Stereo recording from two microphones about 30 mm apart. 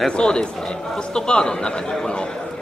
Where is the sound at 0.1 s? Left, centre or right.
Left.